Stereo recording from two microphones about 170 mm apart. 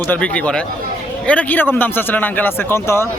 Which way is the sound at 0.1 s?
5° left (ahead or behind).